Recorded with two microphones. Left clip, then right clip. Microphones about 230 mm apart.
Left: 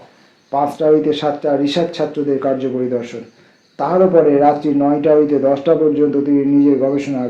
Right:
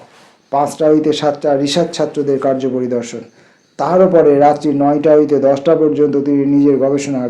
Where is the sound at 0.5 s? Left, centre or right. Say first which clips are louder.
Right 1 dB; right.